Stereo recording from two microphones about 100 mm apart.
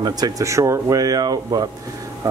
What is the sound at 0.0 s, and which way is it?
Speech, 40° right (ahead or behind).